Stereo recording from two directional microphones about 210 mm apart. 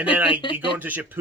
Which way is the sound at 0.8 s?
10° right (ahead or behind).